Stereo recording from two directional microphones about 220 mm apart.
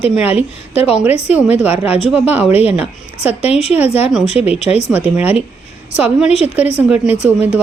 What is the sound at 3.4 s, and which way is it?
Speech, 30° left (ahead or behind).